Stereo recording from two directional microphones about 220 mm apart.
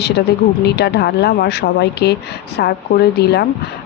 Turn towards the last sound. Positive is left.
turn(degrees=50)  # may be behind; listen again after turning